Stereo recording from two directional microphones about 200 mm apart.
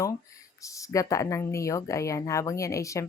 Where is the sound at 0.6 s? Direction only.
15° left (ahead or behind).